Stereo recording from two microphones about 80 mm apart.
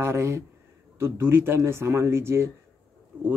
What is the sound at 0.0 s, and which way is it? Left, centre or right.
Speech, right.